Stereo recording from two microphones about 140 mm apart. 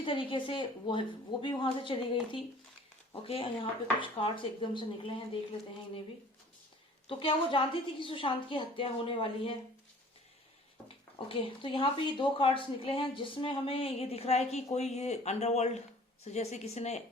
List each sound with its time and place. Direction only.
0.0 s a woman's voice: 35° left (ahead or behind)
3.2 s a woman's voice: 40° left (ahead or behind)
7.1 s a woman's voice: 40° left (ahead or behind)
10.8 s speech: 40° left (ahead or behind)